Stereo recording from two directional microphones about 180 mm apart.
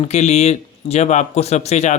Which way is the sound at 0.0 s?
35° left (ahead or behind).